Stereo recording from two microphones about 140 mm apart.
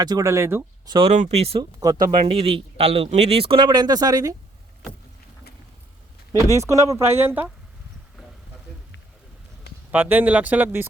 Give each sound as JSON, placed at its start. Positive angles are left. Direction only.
{"t": 0.0, "sound": "speech", "side_deg": -25}
{"t": 0.9, "sound": "speech", "side_deg": -35}
{"t": 1.1, "sound": "a man's voice", "side_deg": -50}
{"t": 1.8, "sound": "speech", "side_deg": -30}
{"t": 2.2, "sound": "a man's voice", "side_deg": -40}
{"t": 6.3, "sound": "speech", "side_deg": -20}
{"t": 9.9, "sound": "speech", "side_deg": -10}